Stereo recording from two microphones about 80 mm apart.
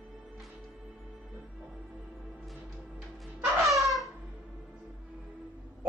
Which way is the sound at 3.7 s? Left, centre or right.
Centre.